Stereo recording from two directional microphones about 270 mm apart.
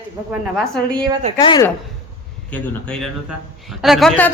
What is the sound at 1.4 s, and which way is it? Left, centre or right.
Speech, centre.